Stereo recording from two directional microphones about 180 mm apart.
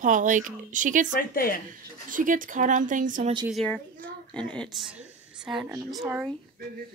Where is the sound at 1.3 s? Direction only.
55° left (ahead or behind).